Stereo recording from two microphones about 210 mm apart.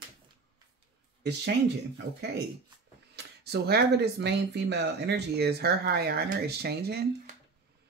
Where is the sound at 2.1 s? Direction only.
90° right.